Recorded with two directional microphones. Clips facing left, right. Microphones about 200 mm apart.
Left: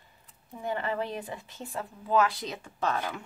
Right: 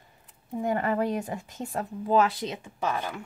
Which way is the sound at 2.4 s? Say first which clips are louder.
Right 1 dB; 20° right (ahead or behind).